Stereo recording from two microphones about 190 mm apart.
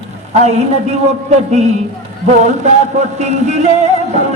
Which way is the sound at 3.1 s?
35° right (ahead or behind).